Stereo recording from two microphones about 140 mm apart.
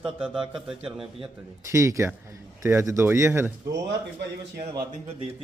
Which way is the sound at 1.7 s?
20° right (ahead or behind).